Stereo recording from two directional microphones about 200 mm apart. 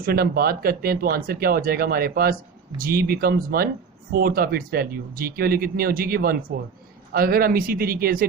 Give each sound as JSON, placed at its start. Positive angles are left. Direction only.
{"t": 0.0, "sound": "speech", "side_deg": -50}